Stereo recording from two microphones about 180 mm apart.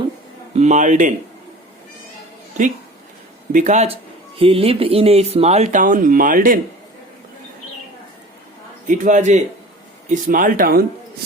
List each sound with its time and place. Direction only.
0.5 s speech: 40° right (ahead or behind)
3.5 s speech: 40° right (ahead or behind)
8.9 s speech: 40° right (ahead or behind)